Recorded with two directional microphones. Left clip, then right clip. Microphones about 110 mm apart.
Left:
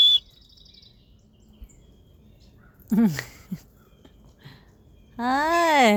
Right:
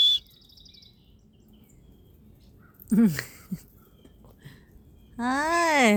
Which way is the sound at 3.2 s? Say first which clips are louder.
Left 1 dB; 30° left (ahead or behind).